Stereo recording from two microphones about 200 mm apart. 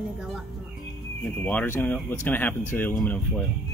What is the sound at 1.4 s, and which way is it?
Speech, 10° left (ahead or behind).